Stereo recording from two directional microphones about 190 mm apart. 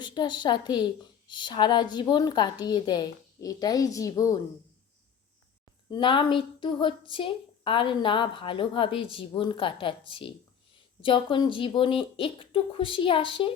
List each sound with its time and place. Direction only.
0.0 s a woman's voice: 25° left (ahead or behind)
5.9 s a woman's voice: 25° left (ahead or behind)